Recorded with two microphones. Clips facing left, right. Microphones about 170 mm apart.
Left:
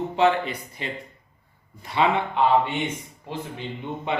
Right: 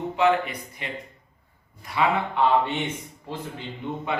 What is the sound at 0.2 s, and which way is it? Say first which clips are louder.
Speech: left 1 dB; 30° left (ahead or behind).